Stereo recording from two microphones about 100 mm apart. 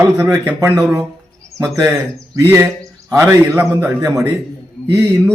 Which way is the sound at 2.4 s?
25° right (ahead or behind).